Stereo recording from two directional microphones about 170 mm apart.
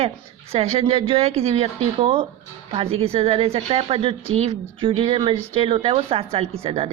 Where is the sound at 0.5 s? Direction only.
35° right (ahead or behind).